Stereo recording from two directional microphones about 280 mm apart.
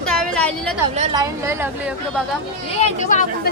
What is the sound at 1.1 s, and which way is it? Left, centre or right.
A woman's voice, centre.